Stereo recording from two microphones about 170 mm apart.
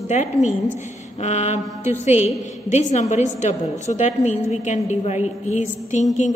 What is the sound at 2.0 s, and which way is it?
A woman's voice, 40° left (ahead or behind).